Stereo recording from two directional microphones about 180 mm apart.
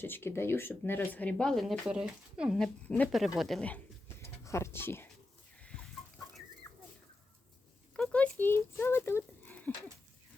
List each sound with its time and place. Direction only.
0.0 s speech: 10° left (ahead or behind); by 2.6 s 5° right (ahead or behind)
2.8 s speech: 10° left (ahead or behind)
4.2 s speech: 15° left (ahead or behind)
7.9 s a sound: 5° left (ahead or behind)